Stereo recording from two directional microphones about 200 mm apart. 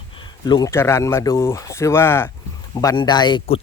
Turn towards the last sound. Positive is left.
turn(degrees=25)  # may be behind; listen again after turning